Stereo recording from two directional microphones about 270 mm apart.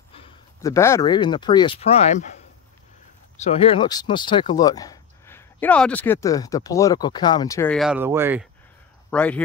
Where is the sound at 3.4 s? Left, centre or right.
Left; by 8.4 s centre.